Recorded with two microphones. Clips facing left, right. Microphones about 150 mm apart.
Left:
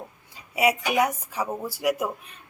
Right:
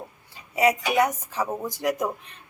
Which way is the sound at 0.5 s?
10° left (ahead or behind).